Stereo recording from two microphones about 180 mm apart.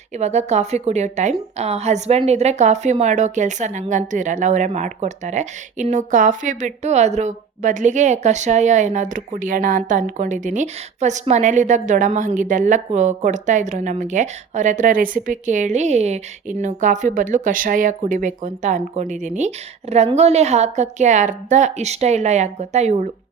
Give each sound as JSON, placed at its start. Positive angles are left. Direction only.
{"t": 0.1, "sound": "speech", "side_deg": -40}